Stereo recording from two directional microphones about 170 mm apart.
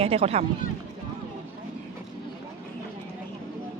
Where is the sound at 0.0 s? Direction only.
35° right (ahead or behind).